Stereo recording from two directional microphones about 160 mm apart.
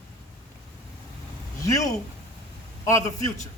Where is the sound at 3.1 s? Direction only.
20° left (ahead or behind).